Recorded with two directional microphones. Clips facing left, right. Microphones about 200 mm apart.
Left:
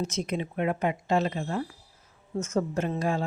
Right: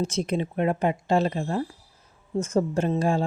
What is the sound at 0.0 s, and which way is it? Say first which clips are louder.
A woman's voice: right 4 dB; 30° right (ahead or behind).